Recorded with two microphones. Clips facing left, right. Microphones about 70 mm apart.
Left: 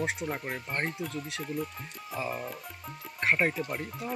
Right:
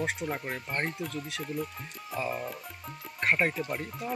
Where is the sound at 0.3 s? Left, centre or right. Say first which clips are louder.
Even; centre.